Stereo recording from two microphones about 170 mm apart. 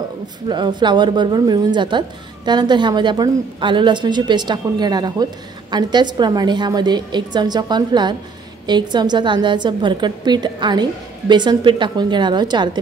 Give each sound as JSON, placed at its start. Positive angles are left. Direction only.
{"t": 0.5, "sound": "a woman's voice", "side_deg": -25}